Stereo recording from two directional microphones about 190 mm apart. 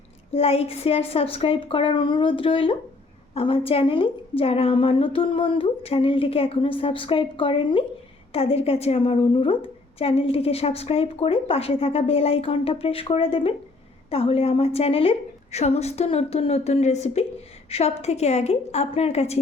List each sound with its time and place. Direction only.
0.3 s a woman's voice: 30° left (ahead or behind)